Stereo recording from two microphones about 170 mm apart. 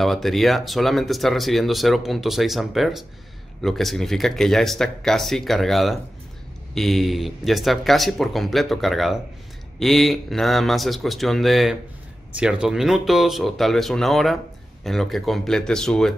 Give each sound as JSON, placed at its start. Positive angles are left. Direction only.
{"t": 0.0, "sound": "speech", "side_deg": 0}